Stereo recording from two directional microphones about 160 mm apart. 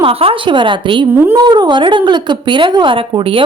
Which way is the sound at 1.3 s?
25° right (ahead or behind).